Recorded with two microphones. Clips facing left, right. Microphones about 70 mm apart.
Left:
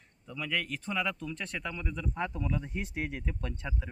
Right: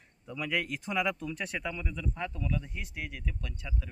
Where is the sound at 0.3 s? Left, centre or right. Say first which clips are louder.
Right 2 dB; centre.